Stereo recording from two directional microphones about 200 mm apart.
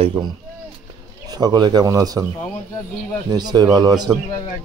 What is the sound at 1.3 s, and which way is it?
Speech, 20° right (ahead or behind).